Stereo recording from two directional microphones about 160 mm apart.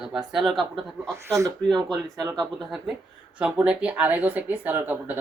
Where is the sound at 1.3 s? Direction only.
20° right (ahead or behind).